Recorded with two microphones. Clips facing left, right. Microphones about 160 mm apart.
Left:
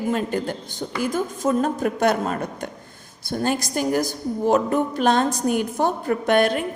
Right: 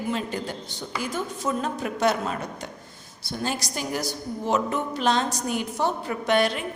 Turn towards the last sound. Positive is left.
turn(degrees=50)  # may be behind; listen again after turning